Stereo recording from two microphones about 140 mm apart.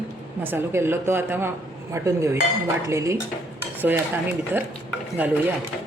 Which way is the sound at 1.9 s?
20° right (ahead or behind).